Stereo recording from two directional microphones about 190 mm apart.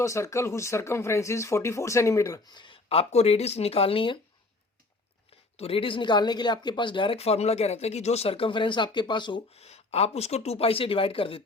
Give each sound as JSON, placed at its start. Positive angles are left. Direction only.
{"t": 0.0, "sound": "speech", "side_deg": 15}
{"t": 5.5, "sound": "speech", "side_deg": 30}